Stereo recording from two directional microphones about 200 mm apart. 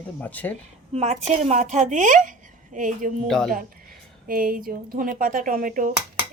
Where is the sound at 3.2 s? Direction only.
5° left (ahead or behind).